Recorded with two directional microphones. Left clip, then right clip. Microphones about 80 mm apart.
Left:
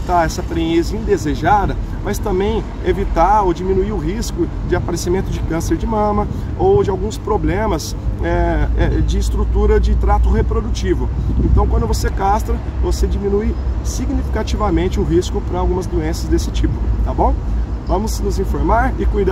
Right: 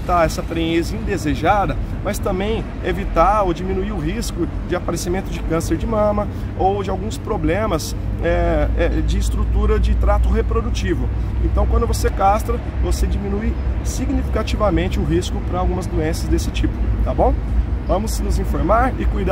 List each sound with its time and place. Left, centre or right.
0.1 s speech: right
17.8 s speech: right